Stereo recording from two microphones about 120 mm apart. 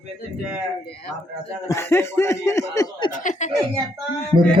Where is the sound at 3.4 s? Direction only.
85° left.